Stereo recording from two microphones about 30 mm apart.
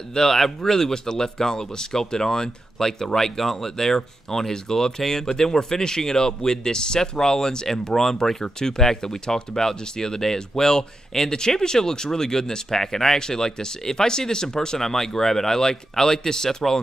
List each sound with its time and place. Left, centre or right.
0.1 s speech: centre